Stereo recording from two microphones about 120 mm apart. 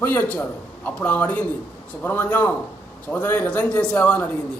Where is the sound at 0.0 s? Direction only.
15° left (ahead or behind).